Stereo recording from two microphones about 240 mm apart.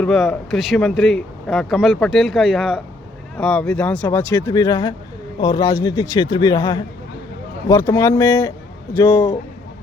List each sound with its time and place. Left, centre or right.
0.0 s speech: centre